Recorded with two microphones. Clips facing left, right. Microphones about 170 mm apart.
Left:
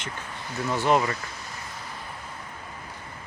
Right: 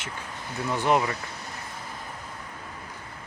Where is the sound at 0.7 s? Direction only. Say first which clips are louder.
Left 1 dB; 15° right (ahead or behind).